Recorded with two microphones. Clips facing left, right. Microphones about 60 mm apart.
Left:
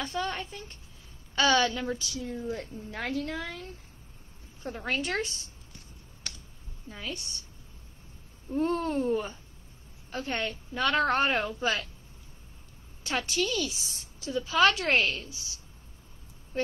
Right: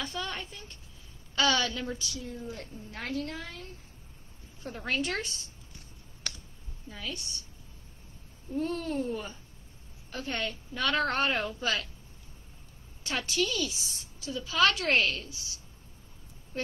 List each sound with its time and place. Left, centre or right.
0.0 s a woman's voice: left
2.0 s a woman's voice: left
2.7 s speech: left
4.7 s speech: centre
7.0 s a woman's voice: left
8.5 s a woman's voice: left
13.0 s a woman's voice: centre
14.9 s speech: centre